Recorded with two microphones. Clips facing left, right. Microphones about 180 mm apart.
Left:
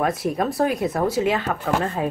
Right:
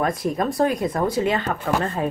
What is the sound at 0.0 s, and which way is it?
Speech, 5° left (ahead or behind).